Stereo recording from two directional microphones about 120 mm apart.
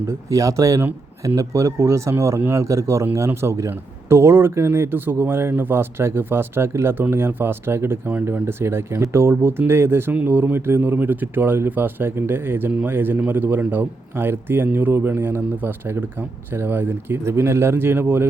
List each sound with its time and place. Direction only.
0.3 s speech: 30° right (ahead or behind)